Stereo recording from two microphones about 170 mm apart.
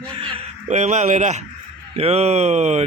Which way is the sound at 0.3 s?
45° right (ahead or behind).